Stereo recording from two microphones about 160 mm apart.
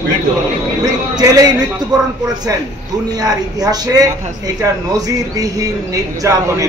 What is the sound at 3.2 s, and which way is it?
A woman's voice, 25° right (ahead or behind).